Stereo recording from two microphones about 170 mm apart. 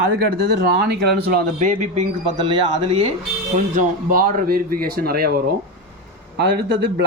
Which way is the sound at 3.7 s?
55° right (ahead or behind).